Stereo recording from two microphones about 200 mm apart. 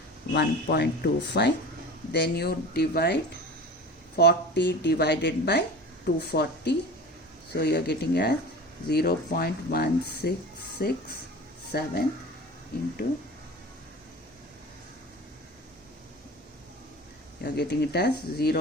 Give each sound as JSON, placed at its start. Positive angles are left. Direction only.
{"t": 0.3, "sound": "speech", "side_deg": 55}
{"t": 4.2, "sound": "speech", "side_deg": 55}
{"t": 17.4, "sound": "speech", "side_deg": 55}